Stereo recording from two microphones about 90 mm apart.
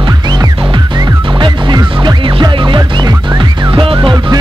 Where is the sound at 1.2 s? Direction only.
60° right (ahead or behind).